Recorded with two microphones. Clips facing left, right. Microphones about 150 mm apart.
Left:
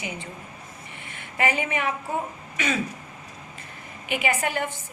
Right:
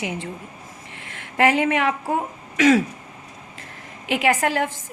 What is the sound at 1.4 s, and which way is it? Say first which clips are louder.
A woman's voice: right 7 dB; 80° right.